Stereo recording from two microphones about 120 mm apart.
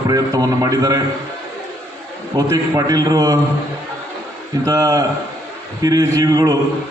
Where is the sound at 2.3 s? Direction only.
30° right (ahead or behind).